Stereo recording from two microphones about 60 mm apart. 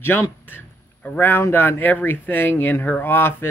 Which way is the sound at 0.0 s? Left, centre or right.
Left.